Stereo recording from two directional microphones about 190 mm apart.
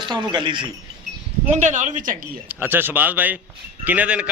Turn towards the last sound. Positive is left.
turn(degrees=-5)  # may be behind; listen again after turning